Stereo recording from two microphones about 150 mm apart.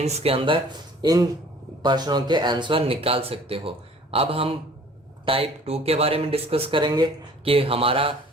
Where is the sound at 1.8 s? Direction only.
30° right (ahead or behind).